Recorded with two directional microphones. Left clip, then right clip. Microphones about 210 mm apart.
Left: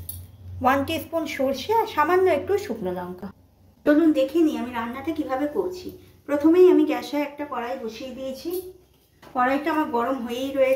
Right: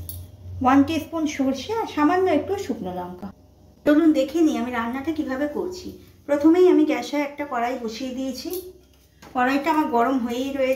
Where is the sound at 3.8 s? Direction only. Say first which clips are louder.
Right 1 dB; 20° right (ahead or behind).